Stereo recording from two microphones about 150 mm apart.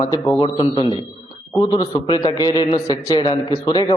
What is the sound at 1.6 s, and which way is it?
A man's voice, 25° left (ahead or behind).